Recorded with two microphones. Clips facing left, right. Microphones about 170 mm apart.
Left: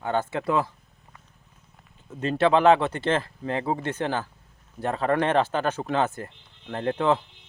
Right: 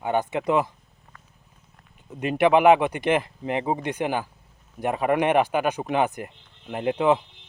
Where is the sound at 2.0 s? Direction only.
15° right (ahead or behind).